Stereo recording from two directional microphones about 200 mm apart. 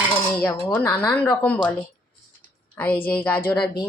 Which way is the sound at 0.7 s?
10° left (ahead or behind).